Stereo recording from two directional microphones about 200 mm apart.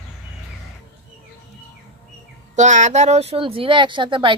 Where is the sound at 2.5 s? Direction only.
35° right (ahead or behind).